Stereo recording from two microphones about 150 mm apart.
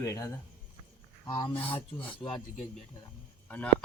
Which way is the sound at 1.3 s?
30° left (ahead or behind).